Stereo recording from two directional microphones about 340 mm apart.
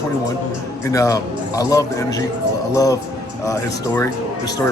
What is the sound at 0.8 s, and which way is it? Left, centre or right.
Speech, centre.